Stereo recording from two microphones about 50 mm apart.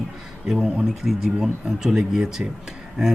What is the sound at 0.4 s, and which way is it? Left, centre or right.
Speech, centre.